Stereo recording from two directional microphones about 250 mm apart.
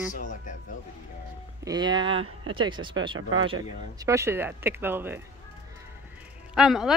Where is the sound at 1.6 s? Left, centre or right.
Centre.